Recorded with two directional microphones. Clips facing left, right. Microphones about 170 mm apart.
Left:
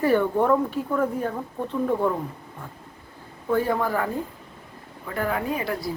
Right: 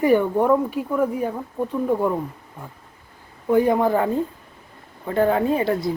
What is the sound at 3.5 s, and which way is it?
Speech, 20° right (ahead or behind).